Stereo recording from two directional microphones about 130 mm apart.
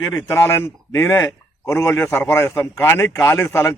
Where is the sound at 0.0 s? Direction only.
25° left (ahead or behind).